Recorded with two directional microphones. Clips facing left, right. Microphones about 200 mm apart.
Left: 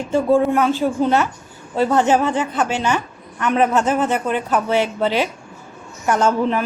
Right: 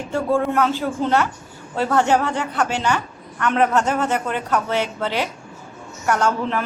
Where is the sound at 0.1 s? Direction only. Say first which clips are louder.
Left 5 dB; 15° left (ahead or behind).